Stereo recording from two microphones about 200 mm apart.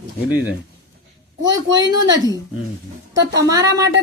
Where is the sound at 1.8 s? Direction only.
20° right (ahead or behind).